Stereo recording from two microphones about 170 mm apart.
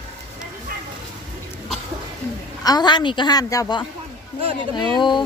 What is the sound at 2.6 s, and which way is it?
A woman's voice, 25° left (ahead or behind).